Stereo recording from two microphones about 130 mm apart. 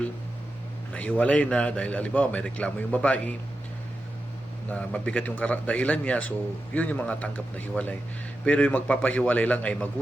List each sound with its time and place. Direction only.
0.9 s a man's voice: 10° left (ahead or behind)
4.7 s a man's voice: 10° left (ahead or behind)